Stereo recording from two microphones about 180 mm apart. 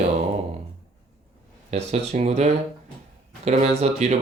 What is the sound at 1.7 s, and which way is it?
Speech, 35° right (ahead or behind).